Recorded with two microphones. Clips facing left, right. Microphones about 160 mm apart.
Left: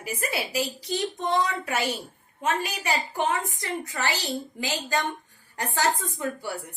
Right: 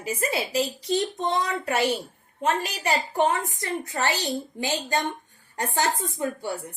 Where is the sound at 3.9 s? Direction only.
30° right (ahead or behind).